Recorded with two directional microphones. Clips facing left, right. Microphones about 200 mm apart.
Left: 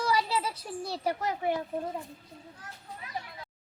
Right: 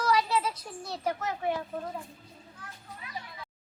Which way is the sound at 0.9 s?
35° left (ahead or behind).